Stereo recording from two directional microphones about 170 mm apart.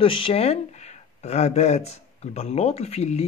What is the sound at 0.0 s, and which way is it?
Speech, 30° left (ahead or behind).